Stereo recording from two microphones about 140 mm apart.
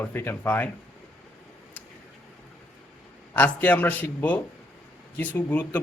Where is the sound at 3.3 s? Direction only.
10° left (ahead or behind).